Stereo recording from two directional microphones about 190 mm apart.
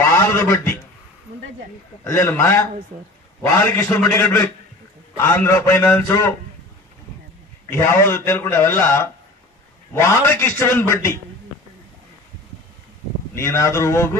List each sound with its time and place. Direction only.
0.0 s a sound: 15° left (ahead or behind)
2.0 s a man's voice: 15° left (ahead or behind)
7.7 s a man's voice: 15° left (ahead or behind)
13.3 s a man's voice: 15° left (ahead or behind)